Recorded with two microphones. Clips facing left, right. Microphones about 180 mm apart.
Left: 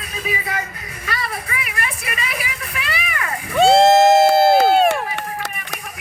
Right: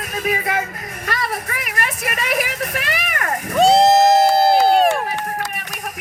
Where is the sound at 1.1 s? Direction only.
45° right (ahead or behind).